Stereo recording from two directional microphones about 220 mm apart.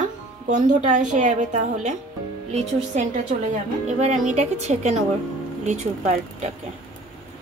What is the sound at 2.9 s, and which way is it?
Speech, 30° right (ahead or behind).